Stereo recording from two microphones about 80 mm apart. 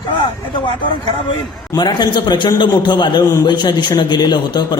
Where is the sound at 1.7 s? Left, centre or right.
Left.